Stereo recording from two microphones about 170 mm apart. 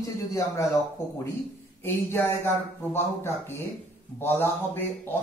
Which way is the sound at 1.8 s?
15° left (ahead or behind).